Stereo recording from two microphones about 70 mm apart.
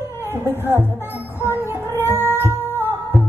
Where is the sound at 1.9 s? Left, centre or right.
Left.